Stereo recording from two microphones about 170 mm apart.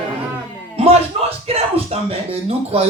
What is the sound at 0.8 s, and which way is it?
A man's voice, 35° right (ahead or behind).